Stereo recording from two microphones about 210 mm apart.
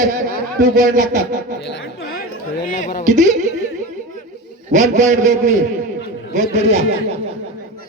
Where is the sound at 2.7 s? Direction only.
40° left (ahead or behind).